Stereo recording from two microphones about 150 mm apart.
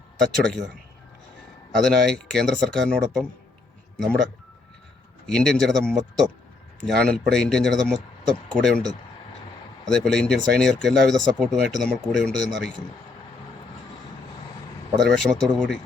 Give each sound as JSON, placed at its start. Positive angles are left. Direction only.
{"t": 0.2, "sound": "speech", "side_deg": 0}
{"t": 1.7, "sound": "speech", "side_deg": 5}
{"t": 5.2, "sound": "speech", "side_deg": 5}
{"t": 9.8, "sound": "speech", "side_deg": 5}
{"t": 15.0, "sound": "speech", "side_deg": 5}